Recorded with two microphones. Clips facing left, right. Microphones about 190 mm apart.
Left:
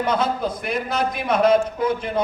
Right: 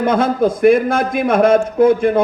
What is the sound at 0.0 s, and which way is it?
A man's voice, 50° right (ahead or behind).